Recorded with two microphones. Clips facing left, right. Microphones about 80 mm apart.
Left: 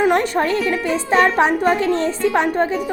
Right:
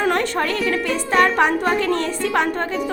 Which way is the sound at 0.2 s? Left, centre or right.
Left.